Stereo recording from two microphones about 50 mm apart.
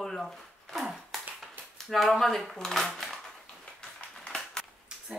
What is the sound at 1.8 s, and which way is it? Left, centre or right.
Speech, centre.